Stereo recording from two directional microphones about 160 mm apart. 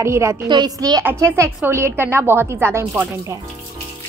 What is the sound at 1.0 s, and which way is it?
A woman's voice, 10° right (ahead or behind).